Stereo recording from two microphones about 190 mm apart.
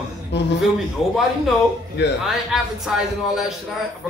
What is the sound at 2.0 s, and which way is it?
Speech, 65° left (ahead or behind).